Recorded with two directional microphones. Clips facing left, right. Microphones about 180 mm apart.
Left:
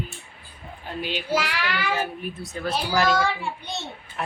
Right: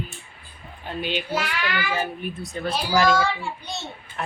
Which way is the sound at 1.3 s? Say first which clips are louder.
Left 1 dB; 90° left.